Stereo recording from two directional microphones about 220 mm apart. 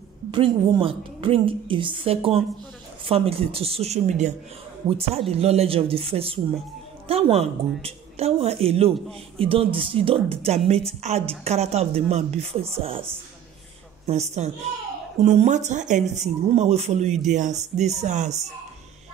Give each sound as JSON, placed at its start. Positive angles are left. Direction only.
{"t": 0.3, "sound": "a woman's voice", "side_deg": -25}
{"t": 14.0, "sound": "a woman's voice", "side_deg": -30}